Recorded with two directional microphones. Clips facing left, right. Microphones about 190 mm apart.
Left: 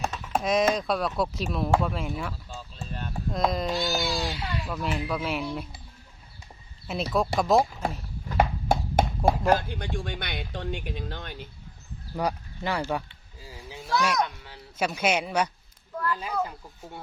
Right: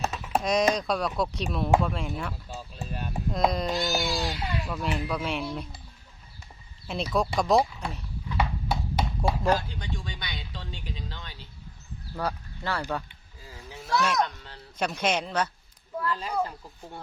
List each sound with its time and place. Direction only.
0.0 s speech: 5° right (ahead or behind)
2.5 s a sound: 15° right (ahead or behind)
3.3 s speech: centre (ahead or behind)
6.8 s speech: 5° left (ahead or behind)
7.7 s speech: 45° left (ahead or behind)
8.3 s clip-clop: 45° left (ahead or behind)
9.5 s speech: 55° left (ahead or behind)
12.1 s a sound: 15° left (ahead or behind)
13.4 s honk: 15° left (ahead or behind)
13.8 s speech: 5° left (ahead or behind)